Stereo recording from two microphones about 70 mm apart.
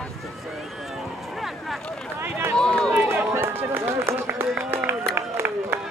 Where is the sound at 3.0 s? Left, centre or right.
Right.